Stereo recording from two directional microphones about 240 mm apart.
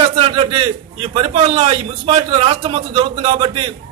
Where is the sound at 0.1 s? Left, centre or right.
Right.